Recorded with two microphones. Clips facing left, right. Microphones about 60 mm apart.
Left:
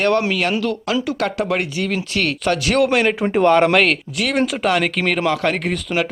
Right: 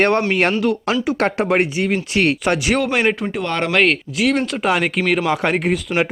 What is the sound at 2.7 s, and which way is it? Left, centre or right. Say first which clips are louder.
Speech: left 3 dB; centre.